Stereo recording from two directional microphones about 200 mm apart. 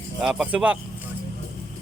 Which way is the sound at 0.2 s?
5° right (ahead or behind).